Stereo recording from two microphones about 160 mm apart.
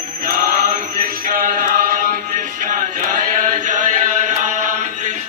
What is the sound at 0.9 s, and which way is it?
Music, 60° right (ahead or behind).